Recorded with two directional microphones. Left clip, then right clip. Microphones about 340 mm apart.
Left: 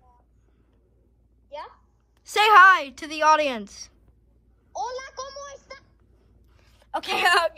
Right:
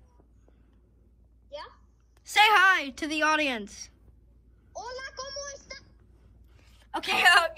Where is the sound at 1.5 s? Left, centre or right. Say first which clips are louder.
Left 4 dB; left.